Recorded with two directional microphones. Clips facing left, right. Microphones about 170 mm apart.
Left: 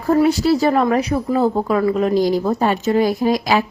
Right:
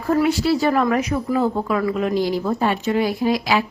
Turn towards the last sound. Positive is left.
turn(degrees=40)  # may be behind; listen again after turning